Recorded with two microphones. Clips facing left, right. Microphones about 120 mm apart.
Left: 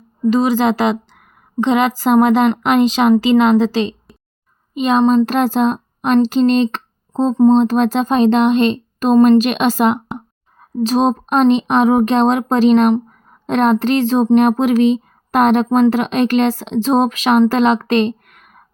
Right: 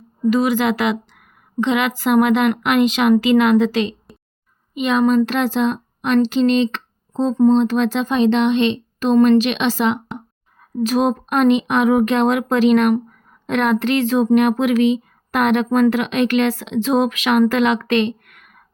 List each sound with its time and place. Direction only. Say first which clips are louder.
0.3 s speech: left 3 dB; 30° left (ahead or behind)
10.6 s a woman's voice: left 3 dB; 30° left (ahead or behind)